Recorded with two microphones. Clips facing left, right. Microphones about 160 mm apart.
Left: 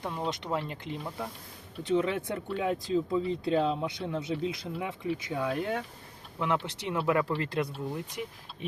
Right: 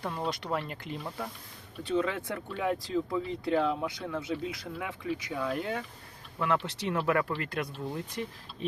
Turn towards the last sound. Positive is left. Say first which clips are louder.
# left 2 dB
turn(degrees=25)  # may be behind; listen again after turning